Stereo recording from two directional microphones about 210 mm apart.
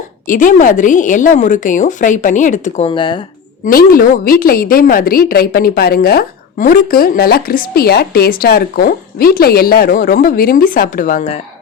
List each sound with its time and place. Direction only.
0.3 s a woman's voice: 40° left (ahead or behind); by 3.2 s 25° left (ahead or behind)
3.7 s a woman's voice: 45° left (ahead or behind)